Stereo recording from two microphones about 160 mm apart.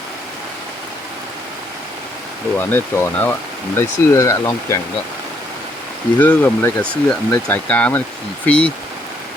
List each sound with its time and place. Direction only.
2.6 s speech: 15° left (ahead or behind)
6.1 s speech: 10° left (ahead or behind)